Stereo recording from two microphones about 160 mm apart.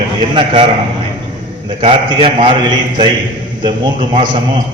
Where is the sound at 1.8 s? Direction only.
30° right (ahead or behind).